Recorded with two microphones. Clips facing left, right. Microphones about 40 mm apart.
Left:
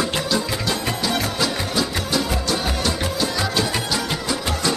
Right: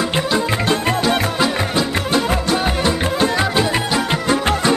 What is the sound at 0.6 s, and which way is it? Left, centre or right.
Music, right.